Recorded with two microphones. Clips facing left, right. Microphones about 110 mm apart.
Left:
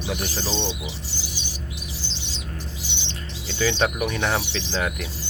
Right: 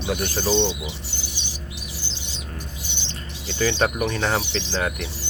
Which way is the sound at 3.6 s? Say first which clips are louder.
Right 1 dB; 5° right (ahead or behind).